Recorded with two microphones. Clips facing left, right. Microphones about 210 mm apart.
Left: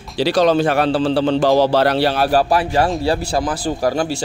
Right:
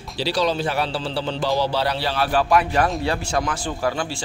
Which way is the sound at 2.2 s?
40° left (ahead or behind).